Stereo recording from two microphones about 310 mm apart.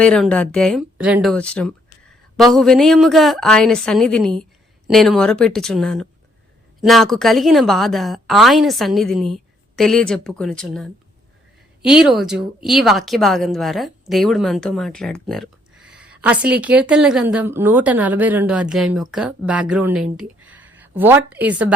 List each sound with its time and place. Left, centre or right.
0.0 s speech: centre